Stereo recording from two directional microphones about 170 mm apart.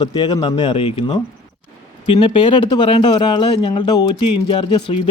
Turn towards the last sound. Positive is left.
turn(degrees=25)  # may be behind; listen again after turning